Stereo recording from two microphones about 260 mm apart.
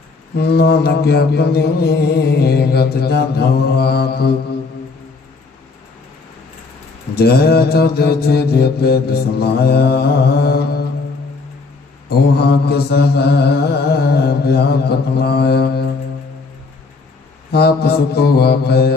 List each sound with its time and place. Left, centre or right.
0.3 s mantra: left
7.2 s mantra: left
12.0 s mantra: left
17.5 s mantra: left